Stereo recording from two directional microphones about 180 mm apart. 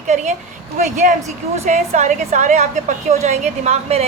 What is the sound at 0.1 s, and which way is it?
Speech, 40° right (ahead or behind).